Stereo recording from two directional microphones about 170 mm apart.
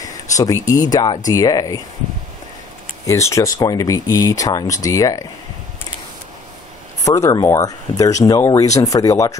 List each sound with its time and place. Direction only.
0.0 s speech: 20° left (ahead or behind)
3.1 s speech: 15° left (ahead or behind)
7.1 s speech: 20° left (ahead or behind)